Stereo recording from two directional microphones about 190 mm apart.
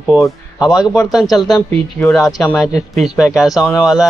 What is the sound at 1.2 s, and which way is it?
Speech, 20° left (ahead or behind).